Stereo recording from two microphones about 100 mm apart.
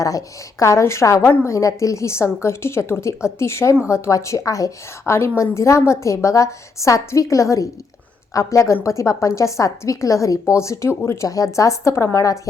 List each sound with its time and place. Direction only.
0.0 s a woman's voice: 35° left (ahead or behind)